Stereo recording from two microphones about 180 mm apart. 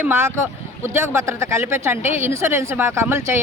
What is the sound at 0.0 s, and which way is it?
Speech, 15° right (ahead or behind).